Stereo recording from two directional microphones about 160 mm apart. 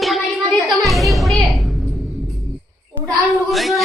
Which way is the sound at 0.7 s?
Centre (ahead or behind).